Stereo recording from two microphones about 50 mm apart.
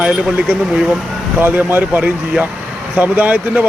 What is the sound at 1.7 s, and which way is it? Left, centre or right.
Speech, right.